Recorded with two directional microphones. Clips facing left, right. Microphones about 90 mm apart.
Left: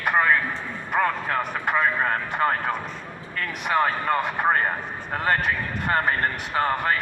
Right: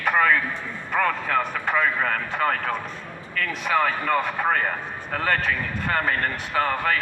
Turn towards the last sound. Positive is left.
turn(degrees=25)  # may be behind; listen again after turning